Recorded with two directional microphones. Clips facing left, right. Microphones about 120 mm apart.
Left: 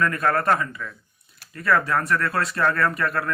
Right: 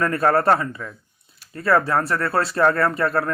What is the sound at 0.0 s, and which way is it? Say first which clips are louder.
Speech: right 4 dB; 35° right (ahead or behind).